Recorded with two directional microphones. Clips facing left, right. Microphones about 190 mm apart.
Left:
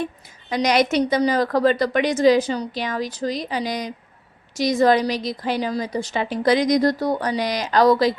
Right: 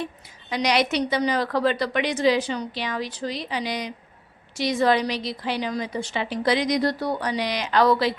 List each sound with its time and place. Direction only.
0.5 s a woman's voice: 45° left (ahead or behind)